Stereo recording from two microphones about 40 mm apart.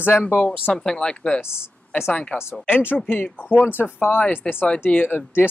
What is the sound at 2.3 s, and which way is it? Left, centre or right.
Speech, left.